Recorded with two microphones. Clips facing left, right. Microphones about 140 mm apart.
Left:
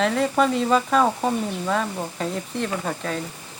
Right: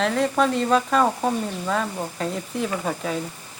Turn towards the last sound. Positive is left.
turn(degrees=-5)  # may be behind; listen again after turning